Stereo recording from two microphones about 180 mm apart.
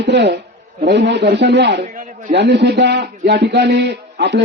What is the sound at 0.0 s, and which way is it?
A man's voice, 75° right (ahead or behind).